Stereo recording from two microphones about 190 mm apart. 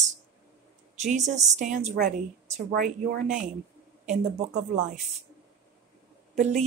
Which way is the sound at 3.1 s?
45° right (ahead or behind).